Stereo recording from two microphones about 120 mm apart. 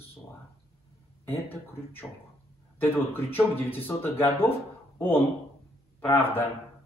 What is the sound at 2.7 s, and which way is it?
Speech, 15° left (ahead or behind).